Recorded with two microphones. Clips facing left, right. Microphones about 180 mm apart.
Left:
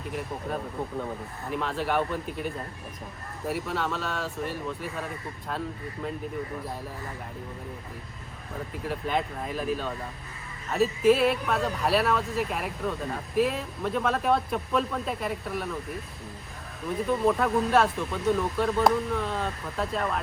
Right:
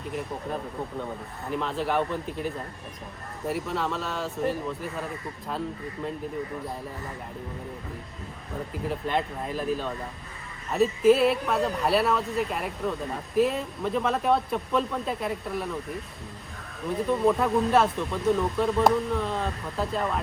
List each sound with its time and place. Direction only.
0.1 s speech: centre (ahead or behind)
8.7 s speech: centre (ahead or behind)